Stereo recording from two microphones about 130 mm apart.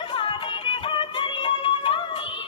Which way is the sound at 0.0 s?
45° left (ahead or behind).